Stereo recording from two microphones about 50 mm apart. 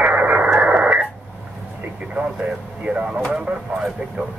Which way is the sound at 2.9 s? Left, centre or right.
Right.